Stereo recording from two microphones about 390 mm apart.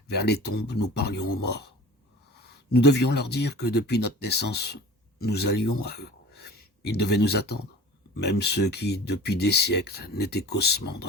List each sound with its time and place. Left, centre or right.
0.1 s speech: left